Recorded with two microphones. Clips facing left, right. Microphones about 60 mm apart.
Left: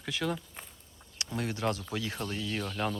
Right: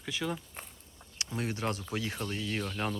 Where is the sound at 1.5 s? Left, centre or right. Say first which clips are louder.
Left 4 dB; right.